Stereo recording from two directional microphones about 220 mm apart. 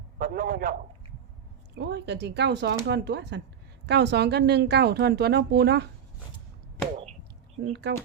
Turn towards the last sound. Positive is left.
turn(degrees=-50)  # may be behind; listen again after turning